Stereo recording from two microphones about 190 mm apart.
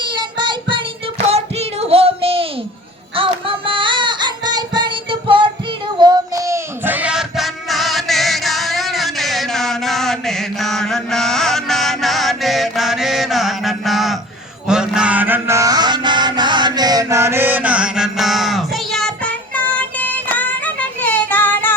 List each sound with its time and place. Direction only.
0.0 s child singing: 25° right (ahead or behind)
3.2 s music: 30° right (ahead or behind)
6.0 s child singing: 20° right (ahead or behind); by 14.2 s centre (ahead or behind)
14.7 s mantra: 5° right (ahead or behind)